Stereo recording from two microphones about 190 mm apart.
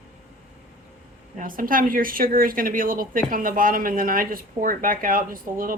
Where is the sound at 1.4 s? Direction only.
45° right (ahead or behind).